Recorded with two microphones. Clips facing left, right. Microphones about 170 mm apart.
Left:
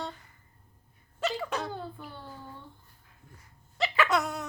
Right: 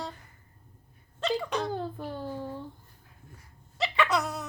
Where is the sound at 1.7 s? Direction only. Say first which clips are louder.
Right 6 dB; 40° right (ahead or behind).